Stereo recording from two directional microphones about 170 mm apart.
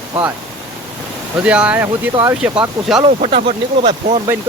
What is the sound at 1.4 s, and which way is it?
Speech, 5° right (ahead or behind).